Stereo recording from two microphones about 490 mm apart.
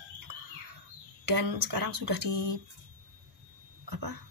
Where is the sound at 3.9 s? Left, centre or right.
Right.